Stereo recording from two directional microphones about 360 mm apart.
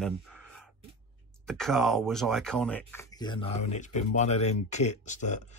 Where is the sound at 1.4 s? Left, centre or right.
Centre.